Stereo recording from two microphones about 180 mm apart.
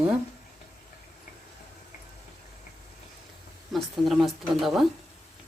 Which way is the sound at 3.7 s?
Centre (ahead or behind).